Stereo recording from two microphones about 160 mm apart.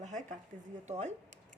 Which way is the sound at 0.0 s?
50° right (ahead or behind).